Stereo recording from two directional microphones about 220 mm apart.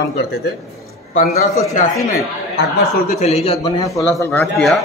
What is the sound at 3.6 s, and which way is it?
Speech, 20° left (ahead or behind).